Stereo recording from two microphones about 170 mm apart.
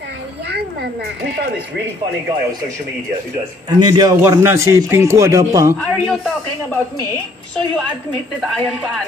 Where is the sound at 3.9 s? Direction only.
25° right (ahead or behind).